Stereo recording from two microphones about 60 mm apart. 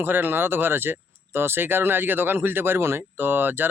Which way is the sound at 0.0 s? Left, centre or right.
Right.